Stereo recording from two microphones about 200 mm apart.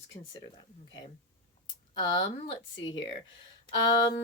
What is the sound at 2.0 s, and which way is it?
Speech, 25° left (ahead or behind).